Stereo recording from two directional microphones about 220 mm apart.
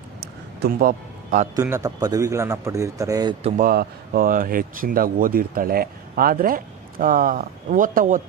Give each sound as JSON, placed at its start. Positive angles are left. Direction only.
{"t": 0.6, "sound": "a man's voice", "side_deg": -40}
{"t": 1.5, "sound": "a man's voice", "side_deg": -10}
{"t": 3.5, "sound": "speech", "side_deg": -40}